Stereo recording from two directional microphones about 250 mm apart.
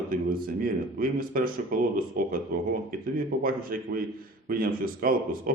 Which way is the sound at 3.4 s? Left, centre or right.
Right.